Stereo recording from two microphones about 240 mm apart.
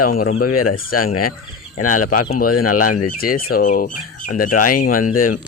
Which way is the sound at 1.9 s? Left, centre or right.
Left.